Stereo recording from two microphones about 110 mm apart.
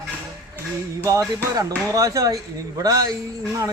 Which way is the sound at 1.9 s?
30° right (ahead or behind).